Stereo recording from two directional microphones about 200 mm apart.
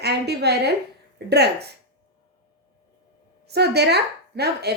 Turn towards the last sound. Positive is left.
turn(degrees=-55)  # may be behind; listen again after turning